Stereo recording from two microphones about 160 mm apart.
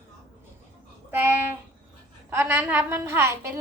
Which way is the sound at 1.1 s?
15° right (ahead or behind).